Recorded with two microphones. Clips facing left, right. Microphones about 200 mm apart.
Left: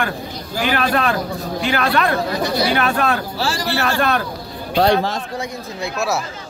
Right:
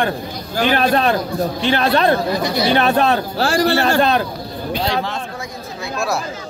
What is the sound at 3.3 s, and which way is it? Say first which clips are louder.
Speech: right 6 dB; 55° right (ahead or behind).